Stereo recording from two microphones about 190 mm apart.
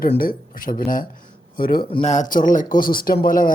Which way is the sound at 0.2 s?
50° left (ahead or behind).